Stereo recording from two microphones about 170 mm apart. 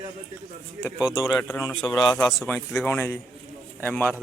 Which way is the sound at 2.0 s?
5° left (ahead or behind).